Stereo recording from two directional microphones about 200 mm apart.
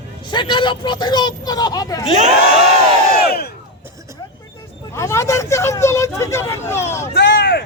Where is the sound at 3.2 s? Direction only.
50° left (ahead or behind).